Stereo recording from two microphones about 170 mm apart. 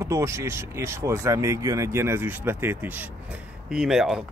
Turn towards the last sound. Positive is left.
turn(degrees=0)  # may be behind; listen again after turning